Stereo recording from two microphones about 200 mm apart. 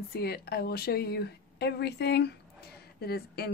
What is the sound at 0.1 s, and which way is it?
Speech, 50° left (ahead or behind).